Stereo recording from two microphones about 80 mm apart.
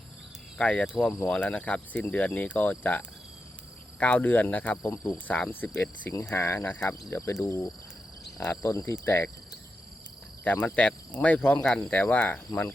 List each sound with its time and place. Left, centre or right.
0.6 s speech: centre
4.0 s speech: left
7.1 s cricket: left
9.0 s speech: left
10.4 s speech: left